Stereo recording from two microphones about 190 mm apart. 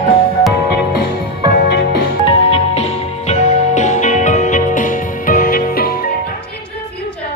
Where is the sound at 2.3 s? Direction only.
30° left (ahead or behind); by 5.9 s 50° left (ahead or behind).